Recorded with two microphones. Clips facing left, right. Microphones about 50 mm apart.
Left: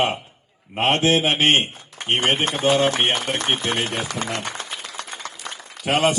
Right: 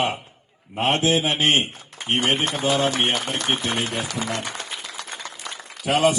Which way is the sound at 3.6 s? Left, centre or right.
Left.